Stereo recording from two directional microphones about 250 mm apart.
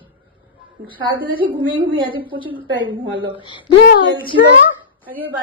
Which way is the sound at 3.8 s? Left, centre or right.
Left.